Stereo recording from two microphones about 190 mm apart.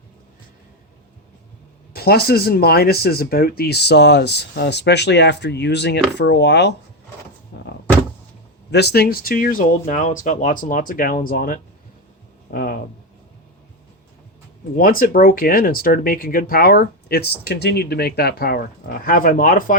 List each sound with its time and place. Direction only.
1.9 s speech: 55° left (ahead or behind)
8.7 s speech: 60° left (ahead or behind)
14.8 s speech: 50° left (ahead or behind)